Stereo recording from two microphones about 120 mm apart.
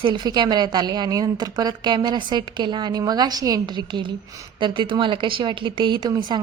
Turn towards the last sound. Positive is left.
turn(degrees=-35)  # may be behind; listen again after turning